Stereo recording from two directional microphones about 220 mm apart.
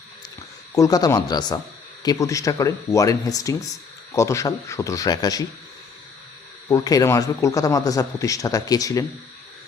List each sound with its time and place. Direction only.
0.7 s a man's voice: 15° left (ahead or behind)
6.7 s a man's voice: 15° left (ahead or behind)